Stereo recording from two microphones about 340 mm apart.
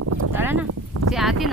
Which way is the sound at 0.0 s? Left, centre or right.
Right.